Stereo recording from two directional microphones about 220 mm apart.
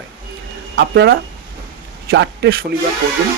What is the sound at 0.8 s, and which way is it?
Speech, 50° right (ahead or behind).